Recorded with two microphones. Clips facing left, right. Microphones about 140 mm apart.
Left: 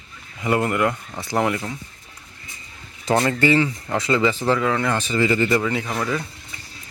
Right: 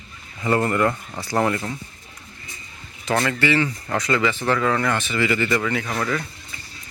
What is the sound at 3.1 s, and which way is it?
Speech, 20° left (ahead or behind).